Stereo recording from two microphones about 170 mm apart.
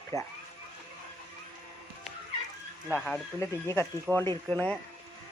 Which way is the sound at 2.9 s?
10° left (ahead or behind).